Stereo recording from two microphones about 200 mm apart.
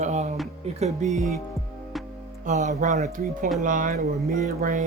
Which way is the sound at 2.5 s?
40° right (ahead or behind).